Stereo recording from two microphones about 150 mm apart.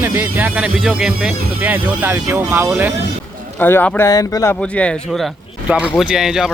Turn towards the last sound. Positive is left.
turn(degrees=-5)  # may be behind; listen again after turning